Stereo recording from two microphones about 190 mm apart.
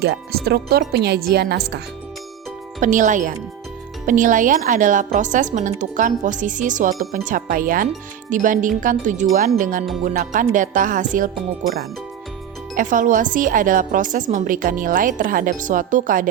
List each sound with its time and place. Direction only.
0.0 s speech: 55° right (ahead or behind)
2.8 s a woman's voice: 40° right (ahead or behind)
12.7 s a woman's voice: 45° right (ahead or behind)